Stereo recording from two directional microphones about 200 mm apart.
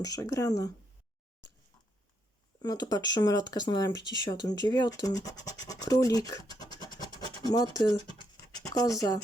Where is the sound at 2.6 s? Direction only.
20° left (ahead or behind).